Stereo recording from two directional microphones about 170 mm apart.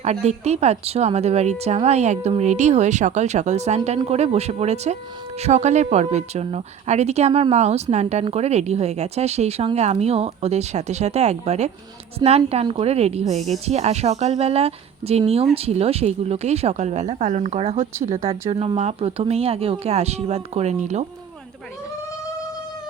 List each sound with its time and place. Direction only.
0.0 s speech: 40° right (ahead or behind)